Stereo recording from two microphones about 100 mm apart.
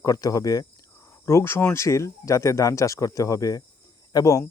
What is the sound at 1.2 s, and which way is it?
Speech, 25° left (ahead or behind).